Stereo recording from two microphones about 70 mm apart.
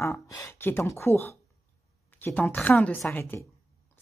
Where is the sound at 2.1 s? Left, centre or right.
Left.